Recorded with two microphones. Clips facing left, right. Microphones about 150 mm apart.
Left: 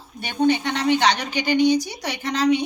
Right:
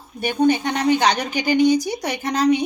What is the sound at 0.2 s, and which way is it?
A woman's voice, 45° right (ahead or behind).